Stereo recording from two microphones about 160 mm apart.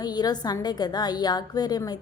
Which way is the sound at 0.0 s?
25° left (ahead or behind).